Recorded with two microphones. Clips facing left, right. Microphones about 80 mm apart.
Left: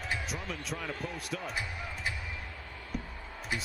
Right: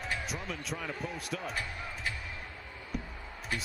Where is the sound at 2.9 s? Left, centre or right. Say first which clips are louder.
Even; centre.